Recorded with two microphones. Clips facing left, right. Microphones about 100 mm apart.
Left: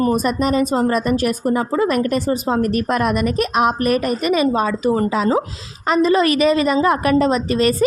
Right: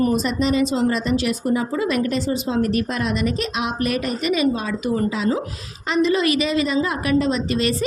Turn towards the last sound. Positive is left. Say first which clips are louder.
# left 4 dB
turn(degrees=45)  # may be behind; listen again after turning